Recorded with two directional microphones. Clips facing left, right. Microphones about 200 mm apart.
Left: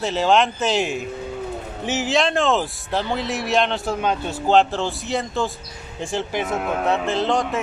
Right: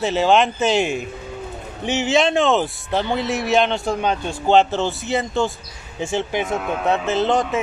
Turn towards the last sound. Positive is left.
turn(degrees=0)  # may be behind; listen again after turning